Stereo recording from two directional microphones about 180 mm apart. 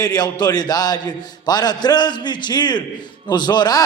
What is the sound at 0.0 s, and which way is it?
A man's voice, 20° left (ahead or behind).